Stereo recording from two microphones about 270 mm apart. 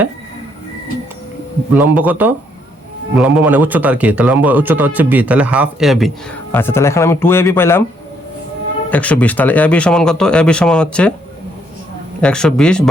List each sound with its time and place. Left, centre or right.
1.7 s a man's voice: centre
8.9 s a man's voice: centre
12.2 s a man's voice: centre